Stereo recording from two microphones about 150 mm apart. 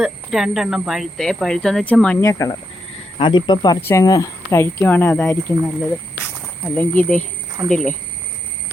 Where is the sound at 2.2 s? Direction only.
20° left (ahead or behind).